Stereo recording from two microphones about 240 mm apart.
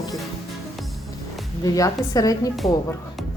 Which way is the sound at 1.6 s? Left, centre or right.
Centre.